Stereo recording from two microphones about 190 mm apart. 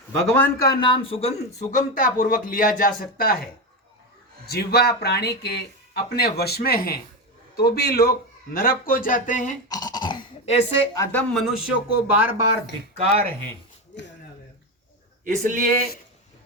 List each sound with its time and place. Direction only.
0.3 s speech: 15° left (ahead or behind); by 3.3 s 50° left (ahead or behind)
4.4 s speech: 55° left (ahead or behind)
9.6 s speech: 20° left (ahead or behind)
10.9 s speech: 10° left (ahead or behind)
11.6 s speech: 10° right (ahead or behind)
12.9 s speech: 35° right (ahead or behind)
15.2 s speech: 45° right (ahead or behind)